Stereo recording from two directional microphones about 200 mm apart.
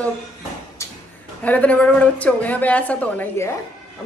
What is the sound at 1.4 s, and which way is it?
A man's voice, 5° left (ahead or behind).